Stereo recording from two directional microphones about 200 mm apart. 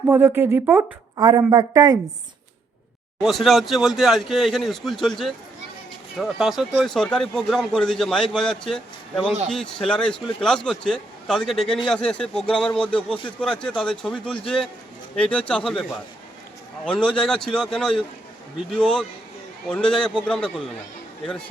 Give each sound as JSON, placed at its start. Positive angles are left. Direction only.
{"t": 0.1, "sound": "a woman's voice", "side_deg": -10}
{"t": 3.2, "sound": "speech", "side_deg": 0}